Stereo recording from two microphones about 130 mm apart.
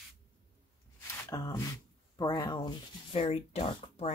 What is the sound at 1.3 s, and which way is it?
Speech, 25° left (ahead or behind).